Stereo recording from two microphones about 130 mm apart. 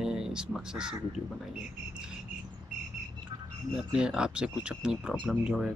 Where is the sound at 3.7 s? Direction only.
5° right (ahead or behind).